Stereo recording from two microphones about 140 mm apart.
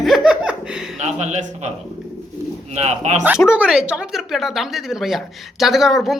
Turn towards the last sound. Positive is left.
turn(degrees=0)  # may be behind; listen again after turning